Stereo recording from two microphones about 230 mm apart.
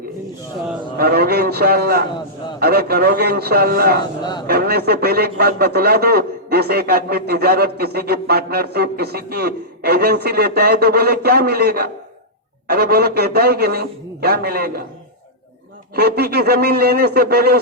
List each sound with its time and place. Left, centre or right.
0.9 s speech: right
16.0 s speech: right